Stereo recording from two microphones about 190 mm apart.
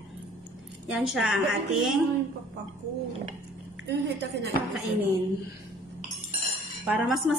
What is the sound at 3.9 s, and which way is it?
Speech, 60° right (ahead or behind).